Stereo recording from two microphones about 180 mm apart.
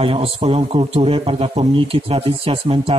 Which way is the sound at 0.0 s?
30° right (ahead or behind).